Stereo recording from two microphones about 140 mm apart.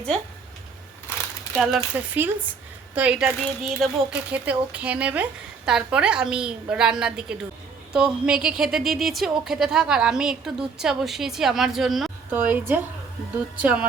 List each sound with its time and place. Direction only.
1.5 s speech: 5° right (ahead or behind)
12.3 s speech: 15° right (ahead or behind)